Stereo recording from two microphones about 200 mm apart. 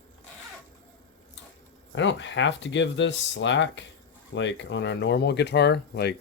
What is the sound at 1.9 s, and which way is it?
Speech, 65° left (ahead or behind).